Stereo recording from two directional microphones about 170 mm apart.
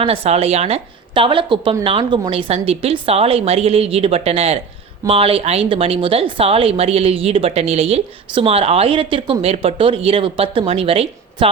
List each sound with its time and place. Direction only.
0.0 s a woman's voice: 35° right (ahead or behind)